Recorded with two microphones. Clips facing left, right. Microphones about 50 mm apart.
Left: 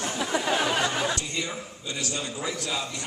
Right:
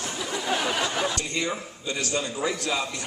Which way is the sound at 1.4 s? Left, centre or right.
Right.